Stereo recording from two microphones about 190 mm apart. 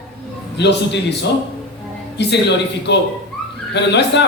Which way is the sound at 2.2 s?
65° left (ahead or behind).